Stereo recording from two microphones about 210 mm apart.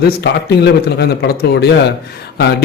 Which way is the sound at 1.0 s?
50° left (ahead or behind).